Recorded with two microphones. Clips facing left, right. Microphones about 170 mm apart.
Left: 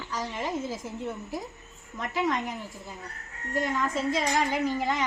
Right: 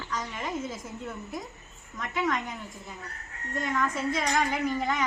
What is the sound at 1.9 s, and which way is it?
Speech, 20° left (ahead or behind).